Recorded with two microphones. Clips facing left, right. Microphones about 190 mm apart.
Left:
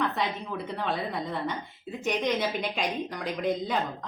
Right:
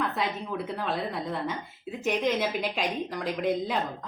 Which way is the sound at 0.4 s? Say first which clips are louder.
Even; 5° right (ahead or behind).